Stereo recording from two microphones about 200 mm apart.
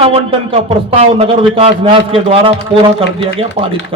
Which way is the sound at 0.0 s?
30° right (ahead or behind).